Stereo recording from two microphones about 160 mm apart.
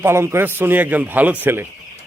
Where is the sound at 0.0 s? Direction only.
15° right (ahead or behind).